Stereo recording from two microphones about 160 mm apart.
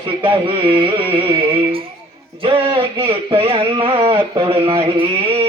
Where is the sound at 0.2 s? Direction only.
35° right (ahead or behind).